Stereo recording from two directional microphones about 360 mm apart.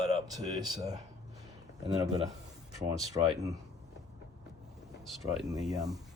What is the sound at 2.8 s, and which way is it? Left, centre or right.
Speech, centre.